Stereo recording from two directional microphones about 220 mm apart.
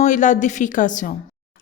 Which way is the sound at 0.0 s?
35° left (ahead or behind).